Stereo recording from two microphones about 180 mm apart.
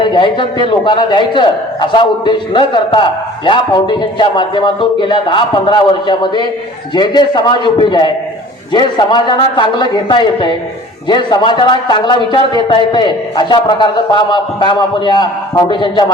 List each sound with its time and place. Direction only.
0.0 s a man's voice: 25° left (ahead or behind)